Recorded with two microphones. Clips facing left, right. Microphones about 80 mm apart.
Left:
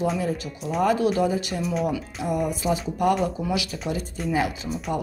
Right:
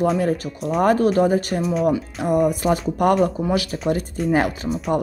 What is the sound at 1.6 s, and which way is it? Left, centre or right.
Speech, centre.